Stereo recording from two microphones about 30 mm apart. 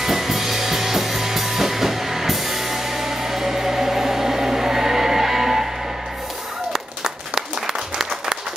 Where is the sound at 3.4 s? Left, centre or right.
Centre.